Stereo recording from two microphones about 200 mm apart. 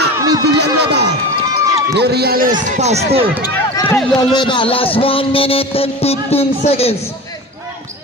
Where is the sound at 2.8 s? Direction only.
35° right (ahead or behind).